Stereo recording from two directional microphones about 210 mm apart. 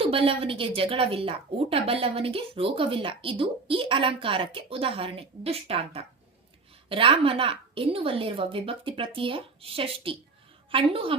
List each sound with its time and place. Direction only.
0.0 s a woman's voice: 25° right (ahead or behind)